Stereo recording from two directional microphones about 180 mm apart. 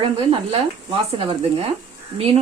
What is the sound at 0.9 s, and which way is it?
Speech, 30° right (ahead or behind).